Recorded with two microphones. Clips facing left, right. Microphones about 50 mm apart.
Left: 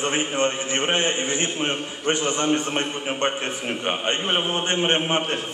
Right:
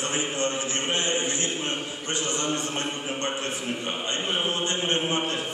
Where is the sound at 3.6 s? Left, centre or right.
Left.